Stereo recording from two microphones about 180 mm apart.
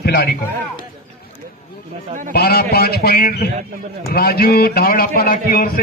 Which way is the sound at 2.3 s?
60° left (ahead or behind).